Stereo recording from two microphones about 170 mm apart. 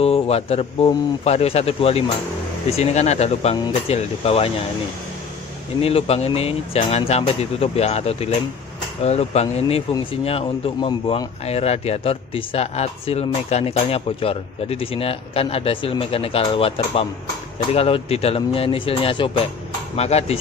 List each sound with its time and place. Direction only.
0.0 s speech: 35° left (ahead or behind)
5.8 s speech: 35° left (ahead or behind)